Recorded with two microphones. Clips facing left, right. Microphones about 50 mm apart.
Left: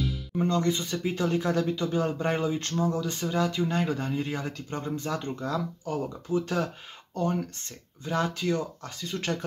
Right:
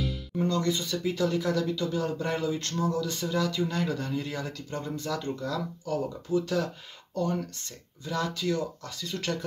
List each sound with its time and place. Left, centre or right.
0.4 s speech: left
8.0 s speech: left